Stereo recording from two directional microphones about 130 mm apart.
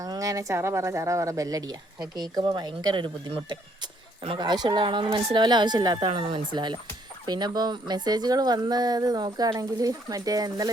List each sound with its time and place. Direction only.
0.0 s speech: 25° right (ahead or behind)